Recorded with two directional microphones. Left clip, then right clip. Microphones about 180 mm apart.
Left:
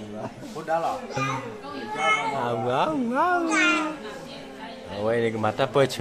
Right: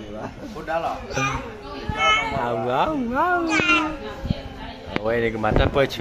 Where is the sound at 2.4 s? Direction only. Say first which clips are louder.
Right 2 dB; centre (ahead or behind).